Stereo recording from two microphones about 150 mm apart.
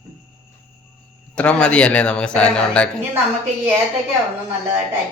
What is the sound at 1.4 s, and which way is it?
A man's voice, 5° left (ahead or behind).